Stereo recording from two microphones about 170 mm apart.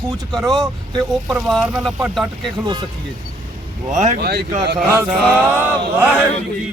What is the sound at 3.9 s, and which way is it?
Speech, 45° right (ahead or behind).